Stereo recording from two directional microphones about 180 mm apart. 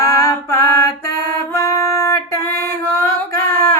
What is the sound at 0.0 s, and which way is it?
Music, 20° left (ahead or behind).